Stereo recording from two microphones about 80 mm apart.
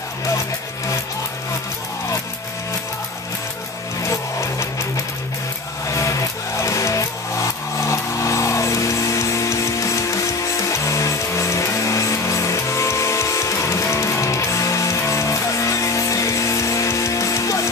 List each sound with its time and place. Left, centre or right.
4.0 s music: left